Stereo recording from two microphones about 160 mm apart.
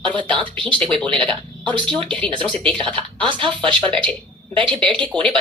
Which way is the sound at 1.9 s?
30° right (ahead or behind).